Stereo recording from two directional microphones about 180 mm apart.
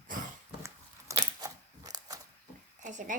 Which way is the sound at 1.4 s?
20° right (ahead or behind).